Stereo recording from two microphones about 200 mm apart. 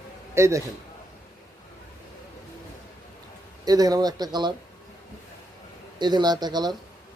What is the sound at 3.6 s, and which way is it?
Speech, 20° right (ahead or behind).